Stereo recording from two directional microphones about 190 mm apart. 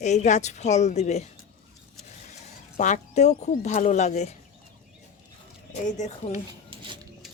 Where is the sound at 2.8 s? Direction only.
40° left (ahead or behind).